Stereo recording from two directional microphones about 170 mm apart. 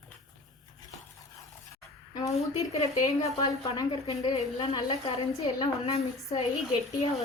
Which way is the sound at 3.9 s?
40° left (ahead or behind).